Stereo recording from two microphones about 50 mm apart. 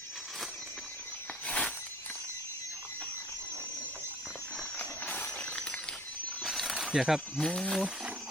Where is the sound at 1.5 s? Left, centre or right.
Left.